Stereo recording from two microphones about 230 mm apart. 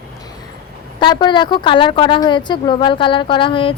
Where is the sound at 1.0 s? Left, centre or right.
Centre.